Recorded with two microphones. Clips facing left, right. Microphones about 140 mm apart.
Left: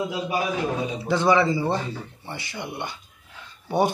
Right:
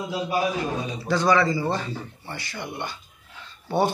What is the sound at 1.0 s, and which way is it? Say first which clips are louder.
A man's voice: left 1 dB; 20° left (ahead or behind).